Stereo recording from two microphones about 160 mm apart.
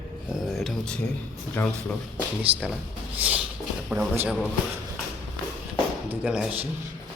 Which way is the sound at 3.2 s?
10° right (ahead or behind).